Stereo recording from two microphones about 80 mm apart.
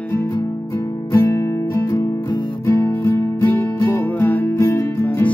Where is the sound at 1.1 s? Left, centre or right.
Left.